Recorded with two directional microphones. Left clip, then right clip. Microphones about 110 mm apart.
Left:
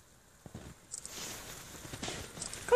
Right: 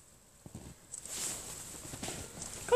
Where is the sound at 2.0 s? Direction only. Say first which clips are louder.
Left 2 dB; 5° left (ahead or behind).